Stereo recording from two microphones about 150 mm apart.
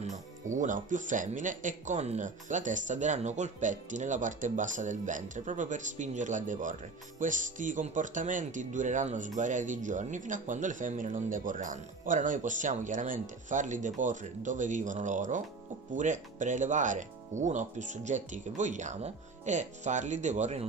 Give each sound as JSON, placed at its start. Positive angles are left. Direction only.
{"t": 0.0, "sound": "speech", "side_deg": -55}